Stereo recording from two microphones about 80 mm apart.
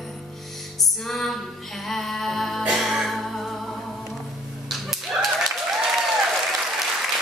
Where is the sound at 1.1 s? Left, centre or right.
Centre.